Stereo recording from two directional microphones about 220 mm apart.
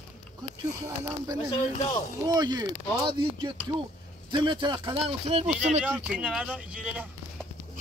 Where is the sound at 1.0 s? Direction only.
15° right (ahead or behind).